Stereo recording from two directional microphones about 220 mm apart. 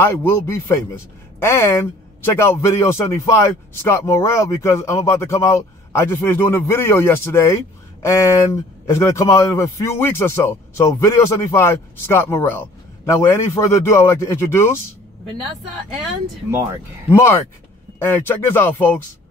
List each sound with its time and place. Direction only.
0.0 s speech: 10° left (ahead or behind)
17.1 s speech: 10° left (ahead or behind)